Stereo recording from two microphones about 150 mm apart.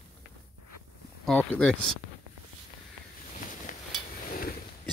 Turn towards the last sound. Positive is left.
turn(degrees=70)  # may be behind; listen again after turning